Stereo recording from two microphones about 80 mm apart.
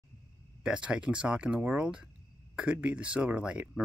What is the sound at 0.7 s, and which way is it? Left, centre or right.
Speech, centre.